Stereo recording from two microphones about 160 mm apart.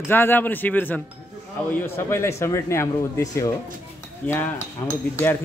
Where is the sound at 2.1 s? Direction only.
15° left (ahead or behind).